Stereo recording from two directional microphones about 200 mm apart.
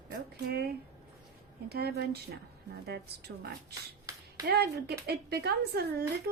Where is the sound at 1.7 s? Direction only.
55° right (ahead or behind).